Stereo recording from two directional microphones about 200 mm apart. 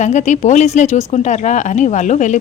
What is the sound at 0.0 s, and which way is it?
A woman's voice, 35° left (ahead or behind).